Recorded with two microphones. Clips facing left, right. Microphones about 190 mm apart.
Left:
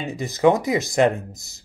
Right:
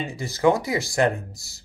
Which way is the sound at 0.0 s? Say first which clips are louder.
Left 3 dB; 20° left (ahead or behind).